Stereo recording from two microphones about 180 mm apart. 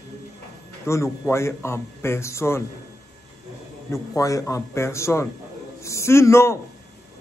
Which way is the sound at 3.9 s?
20° left (ahead or behind).